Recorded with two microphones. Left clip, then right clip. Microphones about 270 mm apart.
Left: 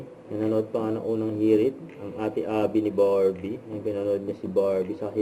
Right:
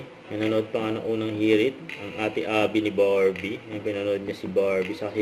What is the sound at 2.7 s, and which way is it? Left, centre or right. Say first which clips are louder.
Speech: even; centre.